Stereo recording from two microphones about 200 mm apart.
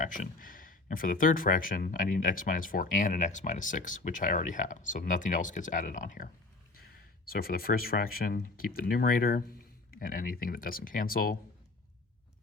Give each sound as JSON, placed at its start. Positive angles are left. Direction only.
{"t": 0.0, "sound": "speech", "side_deg": 45}
{"t": 7.3, "sound": "speech", "side_deg": 50}